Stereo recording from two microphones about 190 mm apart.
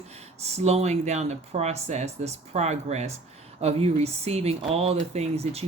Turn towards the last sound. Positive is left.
turn(degrees=-35)  # may be behind; listen again after turning